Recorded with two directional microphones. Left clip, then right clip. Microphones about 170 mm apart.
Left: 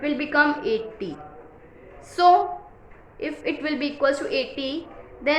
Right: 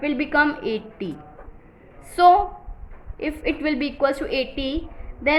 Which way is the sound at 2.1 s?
45° right (ahead or behind).